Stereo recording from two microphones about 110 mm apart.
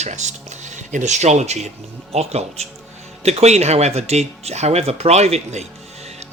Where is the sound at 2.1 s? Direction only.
75° right (ahead or behind).